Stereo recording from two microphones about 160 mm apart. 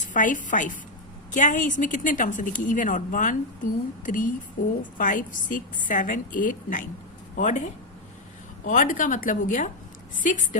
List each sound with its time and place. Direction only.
0.1 s a woman's voice: 55° left (ahead or behind)
8.6 s a woman's voice: 55° left (ahead or behind)